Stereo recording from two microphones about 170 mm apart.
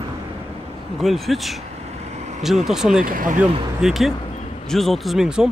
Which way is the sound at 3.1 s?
55° right (ahead or behind).